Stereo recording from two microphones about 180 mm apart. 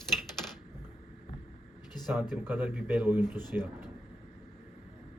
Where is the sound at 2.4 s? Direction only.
10° right (ahead or behind).